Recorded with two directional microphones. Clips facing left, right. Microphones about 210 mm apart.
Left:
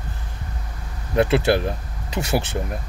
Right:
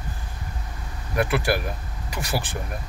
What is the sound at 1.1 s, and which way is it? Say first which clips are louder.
Speech: left 5 dB; 25° left (ahead or behind).